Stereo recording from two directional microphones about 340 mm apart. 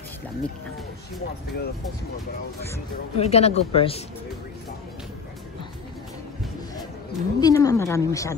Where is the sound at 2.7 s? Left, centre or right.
Centre.